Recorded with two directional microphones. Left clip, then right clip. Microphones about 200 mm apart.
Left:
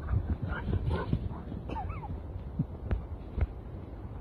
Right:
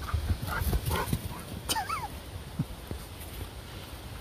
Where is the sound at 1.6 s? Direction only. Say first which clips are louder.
Right 10 dB; 50° right (ahead or behind).